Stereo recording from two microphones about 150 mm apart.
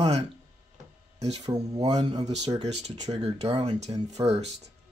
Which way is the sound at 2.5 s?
45° right (ahead or behind).